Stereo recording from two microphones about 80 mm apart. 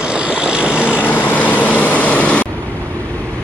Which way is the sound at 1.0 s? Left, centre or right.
Left.